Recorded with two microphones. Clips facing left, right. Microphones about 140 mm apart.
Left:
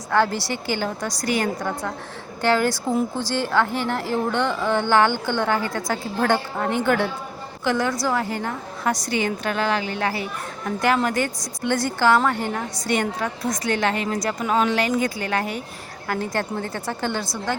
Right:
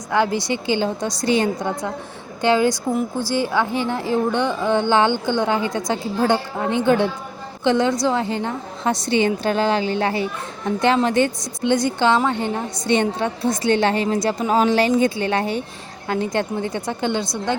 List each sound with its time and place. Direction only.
0.1 s a woman's voice: 15° right (ahead or behind)